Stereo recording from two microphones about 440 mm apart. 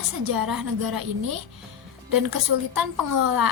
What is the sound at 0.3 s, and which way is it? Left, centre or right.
A woman's voice, right.